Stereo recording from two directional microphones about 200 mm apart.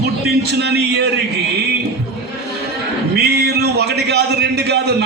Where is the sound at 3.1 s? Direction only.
55° right (ahead or behind).